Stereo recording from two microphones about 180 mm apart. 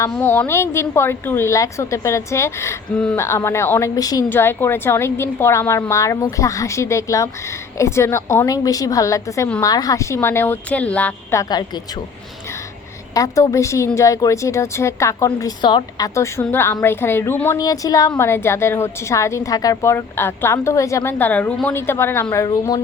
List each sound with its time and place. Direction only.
0.1 s a woman's voice: 10° left (ahead or behind)
13.1 s a woman's voice: 20° left (ahead or behind)